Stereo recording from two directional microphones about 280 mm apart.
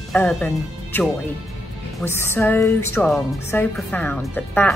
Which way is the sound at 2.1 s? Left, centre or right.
Centre.